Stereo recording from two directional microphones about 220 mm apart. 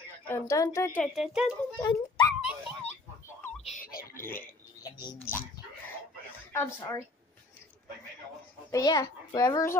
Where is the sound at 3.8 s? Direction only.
40° left (ahead or behind).